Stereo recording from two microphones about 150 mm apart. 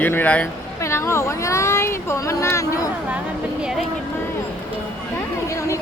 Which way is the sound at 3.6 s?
5° right (ahead or behind).